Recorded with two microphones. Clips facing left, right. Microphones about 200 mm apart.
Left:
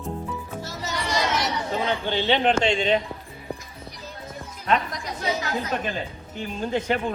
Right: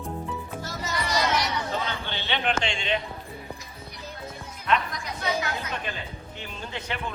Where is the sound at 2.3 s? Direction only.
35° left (ahead or behind).